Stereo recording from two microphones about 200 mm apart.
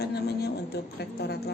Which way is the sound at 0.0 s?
55° left (ahead or behind).